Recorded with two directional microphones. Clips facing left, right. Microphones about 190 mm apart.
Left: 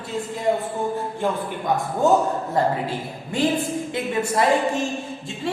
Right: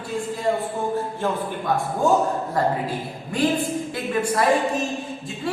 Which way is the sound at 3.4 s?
25° left (ahead or behind).